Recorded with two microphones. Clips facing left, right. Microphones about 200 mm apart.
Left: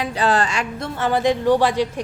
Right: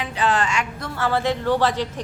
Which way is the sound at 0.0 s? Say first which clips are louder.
Left 3 dB; 35° left (ahead or behind).